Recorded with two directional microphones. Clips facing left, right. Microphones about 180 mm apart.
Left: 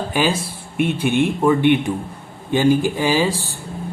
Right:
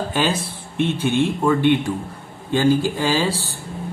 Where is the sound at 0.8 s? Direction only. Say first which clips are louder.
Left 1 dB; 10° left (ahead or behind).